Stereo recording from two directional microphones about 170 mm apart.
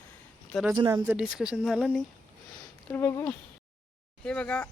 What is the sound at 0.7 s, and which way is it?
Speech, 25° right (ahead or behind).